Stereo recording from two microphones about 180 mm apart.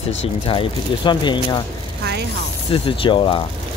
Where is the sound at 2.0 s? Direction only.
65° right (ahead or behind).